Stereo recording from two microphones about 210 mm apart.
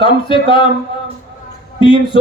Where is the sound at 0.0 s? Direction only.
25° left (ahead or behind).